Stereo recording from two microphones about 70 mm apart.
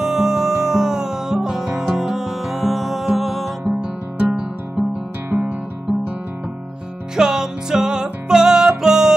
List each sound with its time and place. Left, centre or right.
0.0 s music: centre
3.8 s music: centre
5.3 s guitar: centre
7.2 s music: centre